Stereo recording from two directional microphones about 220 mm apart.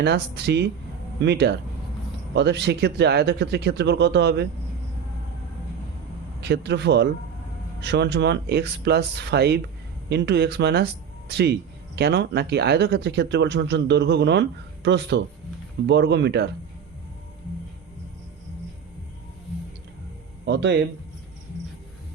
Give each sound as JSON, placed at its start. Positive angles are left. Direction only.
{"t": 0.0, "sound": "speech", "side_deg": -50}
{"t": 6.4, "sound": "speech", "side_deg": -50}
{"t": 20.4, "sound": "speech", "side_deg": -50}